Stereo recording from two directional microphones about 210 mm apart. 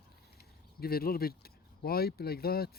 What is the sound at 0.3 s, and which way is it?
Speech, 45° left (ahead or behind).